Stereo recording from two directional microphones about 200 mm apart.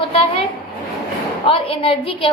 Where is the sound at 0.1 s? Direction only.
30° left (ahead or behind).